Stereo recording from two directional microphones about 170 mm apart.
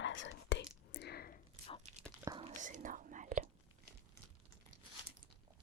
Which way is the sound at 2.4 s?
45° right (ahead or behind).